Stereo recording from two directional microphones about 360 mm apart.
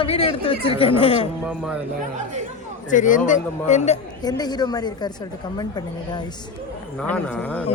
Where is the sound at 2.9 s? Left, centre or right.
Left.